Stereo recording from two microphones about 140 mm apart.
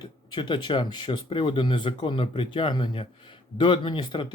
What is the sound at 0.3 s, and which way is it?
Speech, 35° left (ahead or behind).